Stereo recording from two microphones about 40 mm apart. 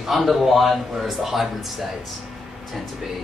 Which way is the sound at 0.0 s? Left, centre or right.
Centre.